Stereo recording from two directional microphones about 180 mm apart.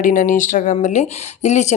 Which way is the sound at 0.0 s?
45° left (ahead or behind).